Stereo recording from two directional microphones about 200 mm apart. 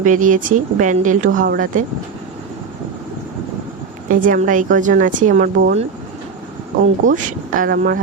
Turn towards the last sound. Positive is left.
turn(degrees=-50)  # may be behind; listen again after turning